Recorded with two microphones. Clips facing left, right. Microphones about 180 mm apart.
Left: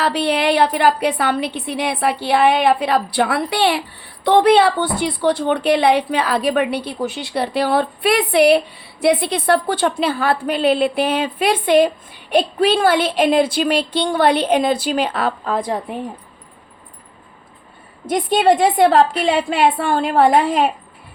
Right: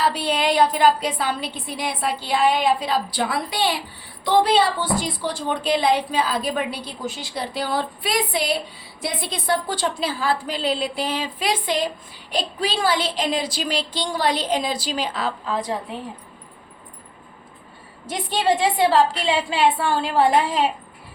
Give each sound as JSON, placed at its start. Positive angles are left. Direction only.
{"t": 0.0, "sound": "a woman's voice", "side_deg": 65}
{"t": 18.1, "sound": "a woman's voice", "side_deg": 55}